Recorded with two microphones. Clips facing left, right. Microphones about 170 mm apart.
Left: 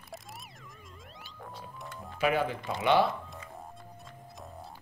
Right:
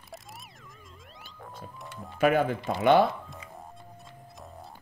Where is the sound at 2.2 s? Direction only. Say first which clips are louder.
Right 5 dB; 50° right (ahead or behind).